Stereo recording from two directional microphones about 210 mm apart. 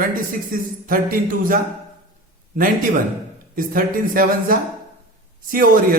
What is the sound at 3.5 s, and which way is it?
A man's voice, 40° right (ahead or behind).